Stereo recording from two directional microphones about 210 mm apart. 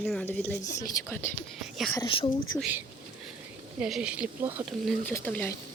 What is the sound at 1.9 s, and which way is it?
Speech, 20° left (ahead or behind).